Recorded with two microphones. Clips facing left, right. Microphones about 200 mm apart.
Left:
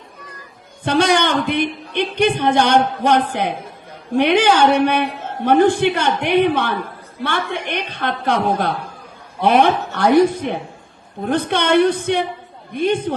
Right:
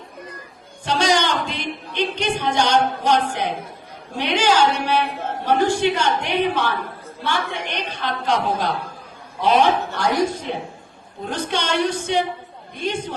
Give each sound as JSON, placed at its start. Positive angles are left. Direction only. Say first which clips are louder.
{"t": 0.9, "sound": "a woman's voice", "louder": "left 4 dB", "side_deg": 55}